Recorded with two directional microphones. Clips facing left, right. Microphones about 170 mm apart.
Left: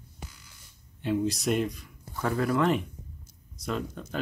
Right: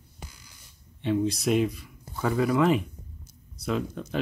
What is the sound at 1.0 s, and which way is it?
Speech, centre (ahead or behind).